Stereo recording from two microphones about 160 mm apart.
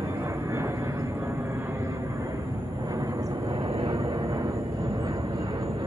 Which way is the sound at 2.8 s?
20° right (ahead or behind).